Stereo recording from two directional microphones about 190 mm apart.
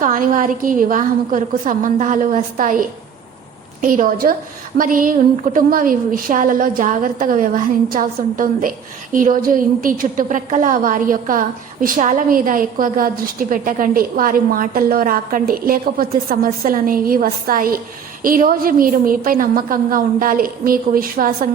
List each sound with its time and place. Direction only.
0.0 s a woman's voice: 45° right (ahead or behind)
3.8 s a woman's voice: 45° right (ahead or behind)